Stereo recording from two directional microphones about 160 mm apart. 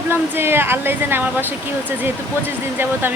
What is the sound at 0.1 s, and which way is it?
Speech, 15° right (ahead or behind).